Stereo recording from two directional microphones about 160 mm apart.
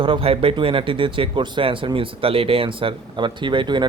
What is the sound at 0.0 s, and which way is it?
Speech, 35° right (ahead or behind).